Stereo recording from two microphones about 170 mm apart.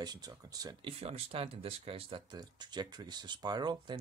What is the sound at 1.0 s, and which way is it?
Speech, 35° right (ahead or behind).